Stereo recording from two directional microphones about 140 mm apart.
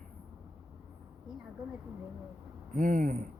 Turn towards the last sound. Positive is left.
turn(degrees=-70)  # may be behind; listen again after turning